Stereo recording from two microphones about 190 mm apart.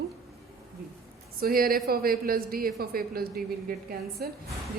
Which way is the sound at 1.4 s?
50° right (ahead or behind).